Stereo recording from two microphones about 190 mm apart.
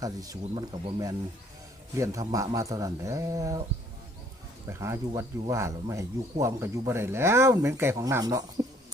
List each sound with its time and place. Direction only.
0.0 s speech: 20° right (ahead or behind)
4.7 s speech: 15° right (ahead or behind)